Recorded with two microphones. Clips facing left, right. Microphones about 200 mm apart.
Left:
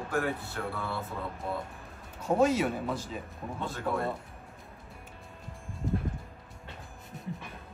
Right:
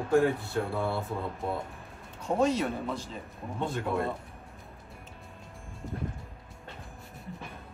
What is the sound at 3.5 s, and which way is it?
Speech, 25° right (ahead or behind).